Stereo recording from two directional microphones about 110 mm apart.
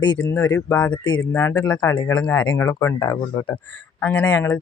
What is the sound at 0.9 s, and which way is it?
Speech, 45° left (ahead or behind).